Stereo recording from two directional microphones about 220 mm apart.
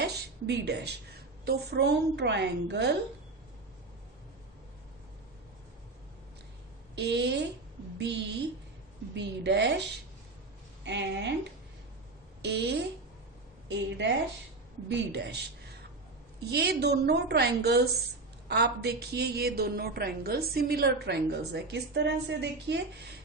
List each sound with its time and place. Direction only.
0.0 s a woman's voice: 50° right (ahead or behind)
6.9 s a woman's voice: 50° right (ahead or behind)
10.8 s a woman's voice: 55° right (ahead or behind)
16.5 s a woman's voice: 50° right (ahead or behind)